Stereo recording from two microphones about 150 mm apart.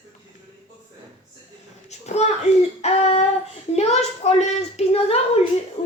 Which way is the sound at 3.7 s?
45° left (ahead or behind).